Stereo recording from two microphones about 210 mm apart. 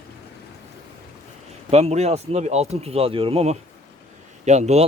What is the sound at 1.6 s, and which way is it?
Speech, 30° right (ahead or behind).